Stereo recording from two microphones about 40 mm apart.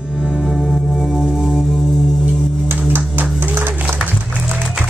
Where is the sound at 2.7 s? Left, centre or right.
Right.